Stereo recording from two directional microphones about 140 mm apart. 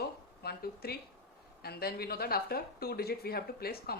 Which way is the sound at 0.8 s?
90° left.